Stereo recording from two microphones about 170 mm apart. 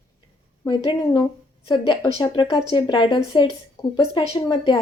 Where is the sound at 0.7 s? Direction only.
25° left (ahead or behind).